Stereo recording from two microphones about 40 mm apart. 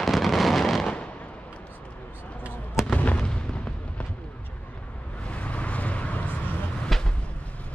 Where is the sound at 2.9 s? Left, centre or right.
Left.